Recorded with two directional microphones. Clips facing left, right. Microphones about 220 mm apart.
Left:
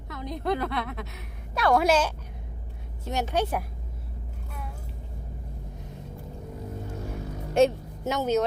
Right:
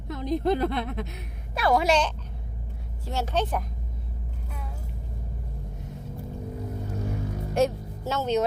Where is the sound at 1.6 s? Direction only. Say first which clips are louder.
Left 1 dB; centre (ahead or behind).